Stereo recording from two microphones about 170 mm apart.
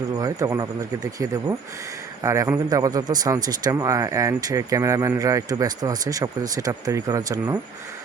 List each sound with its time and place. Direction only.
0.2 s a man's voice: 20° right (ahead or behind)